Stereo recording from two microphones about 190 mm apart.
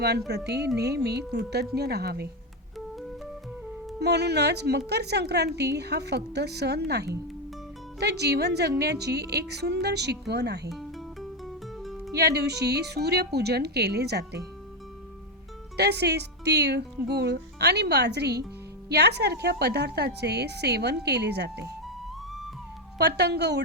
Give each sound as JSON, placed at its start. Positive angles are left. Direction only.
{"t": 0.3, "sound": "a woman's voice", "side_deg": -60}
{"t": 4.0, "sound": "a woman's voice", "side_deg": -60}
{"t": 10.7, "sound": "music", "side_deg": 0}
{"t": 12.1, "sound": "a woman's voice", "side_deg": -60}
{"t": 15.8, "sound": "a woman's voice", "side_deg": -60}
{"t": 23.0, "sound": "a woman's voice", "side_deg": -60}